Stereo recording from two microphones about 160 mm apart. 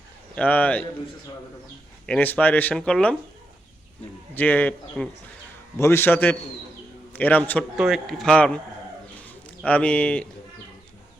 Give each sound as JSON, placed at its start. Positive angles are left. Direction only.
{"t": 0.3, "sound": "speech", "side_deg": 10}
{"t": 2.0, "sound": "speech", "side_deg": 10}
{"t": 4.4, "sound": "a man's voice", "side_deg": 10}
{"t": 7.8, "sound": "a man's voice", "side_deg": 0}
{"t": 9.6, "sound": "speech", "side_deg": 10}